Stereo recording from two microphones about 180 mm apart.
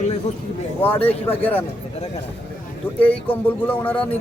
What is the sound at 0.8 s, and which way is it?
Speech, 10° left (ahead or behind).